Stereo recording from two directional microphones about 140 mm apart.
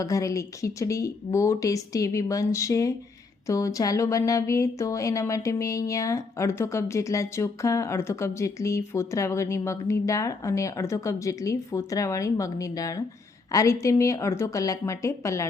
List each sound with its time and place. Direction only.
0.0 s speech: 20° left (ahead or behind)